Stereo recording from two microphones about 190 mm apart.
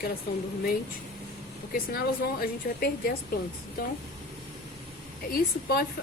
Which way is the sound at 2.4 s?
50° left (ahead or behind).